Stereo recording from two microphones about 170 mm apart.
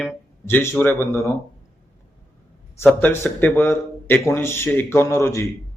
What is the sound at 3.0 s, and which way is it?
Speech, 10° left (ahead or behind).